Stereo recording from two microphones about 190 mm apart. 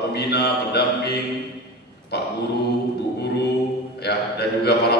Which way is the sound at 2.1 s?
60° left (ahead or behind).